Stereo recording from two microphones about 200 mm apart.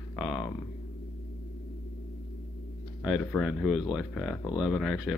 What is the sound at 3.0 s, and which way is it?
Speech, centre (ahead or behind).